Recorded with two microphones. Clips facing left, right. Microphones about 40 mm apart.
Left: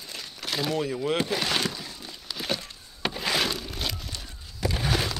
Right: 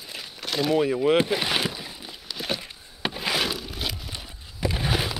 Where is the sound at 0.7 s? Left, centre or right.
Right.